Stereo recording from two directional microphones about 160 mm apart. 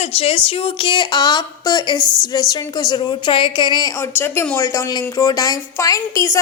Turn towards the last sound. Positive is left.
turn(degrees=20)  # may be behind; listen again after turning